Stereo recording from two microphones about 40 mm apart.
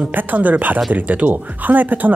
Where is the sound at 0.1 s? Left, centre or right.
Right.